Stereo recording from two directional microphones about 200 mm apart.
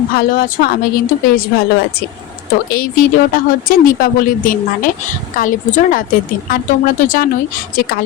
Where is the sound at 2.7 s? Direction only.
45° left (ahead or behind).